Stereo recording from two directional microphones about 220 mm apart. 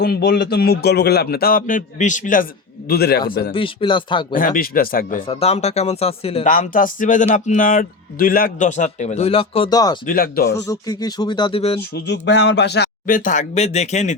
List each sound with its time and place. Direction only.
0.0 s a man's voice: 45° left (ahead or behind)
3.5 s speech: 25° left (ahead or behind)
4.4 s speech: 40° left (ahead or behind)
5.2 s speech: 25° left (ahead or behind)
10.1 s a man's voice: 40° left (ahead or behind)
10.7 s speech: 15° left (ahead or behind)
11.8 s a man's voice: 50° left (ahead or behind); by 14.2 s 30° left (ahead or behind)